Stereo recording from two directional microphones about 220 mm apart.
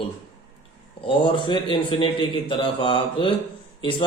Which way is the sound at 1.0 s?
20° left (ahead or behind).